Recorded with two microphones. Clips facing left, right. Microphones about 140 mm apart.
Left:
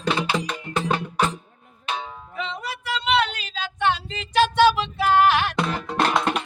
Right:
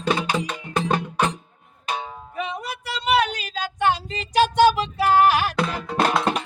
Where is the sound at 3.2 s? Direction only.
45° right (ahead or behind).